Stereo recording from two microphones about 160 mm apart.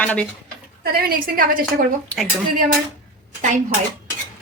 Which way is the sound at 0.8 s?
70° right (ahead or behind).